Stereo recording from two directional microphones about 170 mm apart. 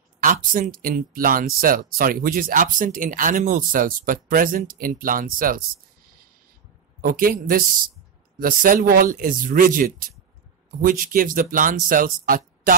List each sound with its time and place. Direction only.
0.2 s speech: 50° right (ahead or behind)
7.0 s speech: 55° right (ahead or behind)